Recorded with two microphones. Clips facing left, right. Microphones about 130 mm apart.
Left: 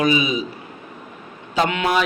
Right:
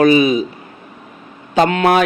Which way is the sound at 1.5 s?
55° right (ahead or behind).